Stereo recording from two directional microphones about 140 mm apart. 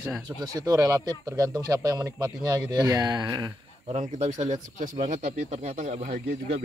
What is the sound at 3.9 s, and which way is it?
Speech, 55° right (ahead or behind).